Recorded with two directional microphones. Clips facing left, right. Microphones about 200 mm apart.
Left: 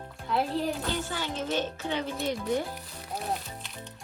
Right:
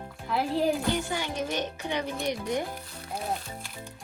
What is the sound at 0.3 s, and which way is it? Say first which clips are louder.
Speech: right 3 dB; centre (ahead or behind).